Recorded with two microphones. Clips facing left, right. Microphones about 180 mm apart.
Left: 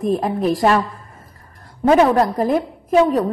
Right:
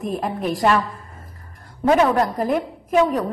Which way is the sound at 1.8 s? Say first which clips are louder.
Left 3 dB; 35° left (ahead or behind).